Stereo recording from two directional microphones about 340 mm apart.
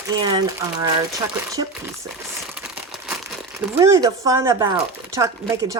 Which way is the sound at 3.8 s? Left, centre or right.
Centre.